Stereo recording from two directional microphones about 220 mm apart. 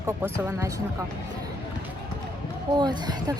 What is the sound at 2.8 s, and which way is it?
Speech, 20° right (ahead or behind).